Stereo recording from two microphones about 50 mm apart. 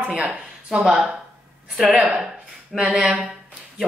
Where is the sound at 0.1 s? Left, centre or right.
Centre.